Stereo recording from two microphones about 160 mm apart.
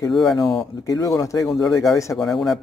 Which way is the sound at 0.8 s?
20° left (ahead or behind).